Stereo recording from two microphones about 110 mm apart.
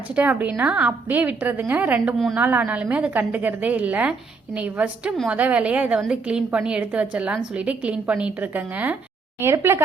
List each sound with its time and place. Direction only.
0.2 s a woman's voice: 15° right (ahead or behind)